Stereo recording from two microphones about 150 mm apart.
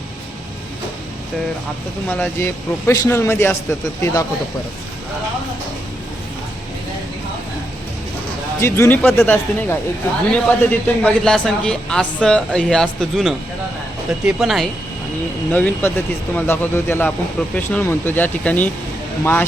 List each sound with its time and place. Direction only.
2.0 s a man's voice: 10° left (ahead or behind)
8.6 s a man's voice: 15° left (ahead or behind); by 14.7 s centre (ahead or behind)
15.5 s a man's voice: 10° left (ahead or behind)